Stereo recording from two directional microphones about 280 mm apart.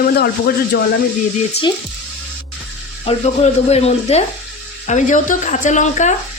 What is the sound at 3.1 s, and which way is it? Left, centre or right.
Speech, left.